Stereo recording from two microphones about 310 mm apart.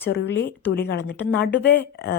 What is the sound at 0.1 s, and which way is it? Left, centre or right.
A woman's voice, left.